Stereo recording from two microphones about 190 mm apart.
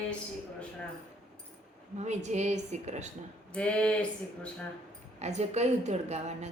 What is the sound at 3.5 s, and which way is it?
Female singing, 5° left (ahead or behind).